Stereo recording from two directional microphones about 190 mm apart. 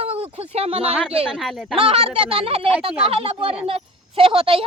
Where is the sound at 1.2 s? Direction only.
Centre (ahead or behind).